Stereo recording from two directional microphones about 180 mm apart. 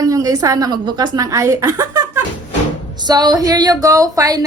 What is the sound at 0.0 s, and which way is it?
A woman's voice, 20° right (ahead or behind).